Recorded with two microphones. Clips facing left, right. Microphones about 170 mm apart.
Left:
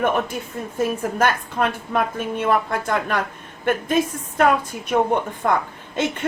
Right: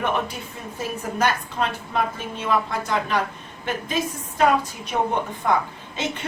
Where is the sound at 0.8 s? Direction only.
55° left (ahead or behind).